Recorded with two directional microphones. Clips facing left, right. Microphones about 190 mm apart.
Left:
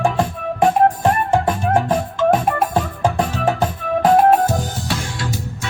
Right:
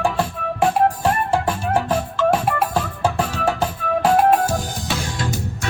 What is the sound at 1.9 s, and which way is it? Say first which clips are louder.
Music: left 2 dB; 10° left (ahead or behind).